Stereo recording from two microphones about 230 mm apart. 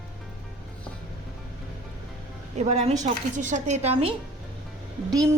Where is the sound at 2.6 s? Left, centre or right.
Right.